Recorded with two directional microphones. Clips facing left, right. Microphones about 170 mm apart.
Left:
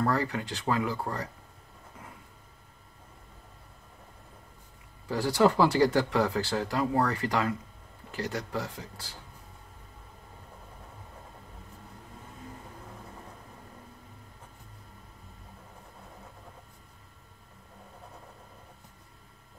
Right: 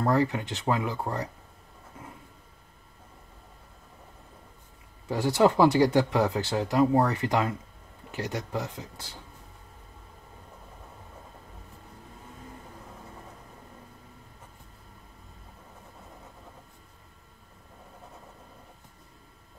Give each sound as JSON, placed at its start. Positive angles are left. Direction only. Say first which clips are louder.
{"t": 0.0, "sound": "speech", "louder": "right 3 dB", "side_deg": -20}
{"t": 5.0, "sound": "speech", "louder": "right 2 dB", "side_deg": -20}